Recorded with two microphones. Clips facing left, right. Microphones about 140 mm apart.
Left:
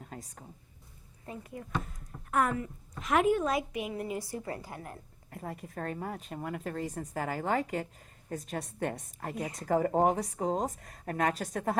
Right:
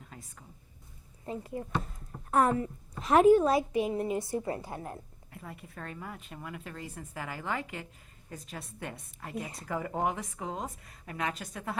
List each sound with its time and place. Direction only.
0.0 s a sound: 40° left (ahead or behind)
1.2 s a woman's voice: 30° right (ahead or behind)
5.3 s a woman's voice: 40° left (ahead or behind)